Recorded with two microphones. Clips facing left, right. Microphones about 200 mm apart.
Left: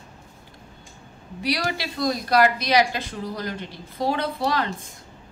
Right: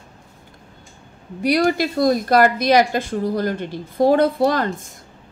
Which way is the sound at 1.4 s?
50° right (ahead or behind).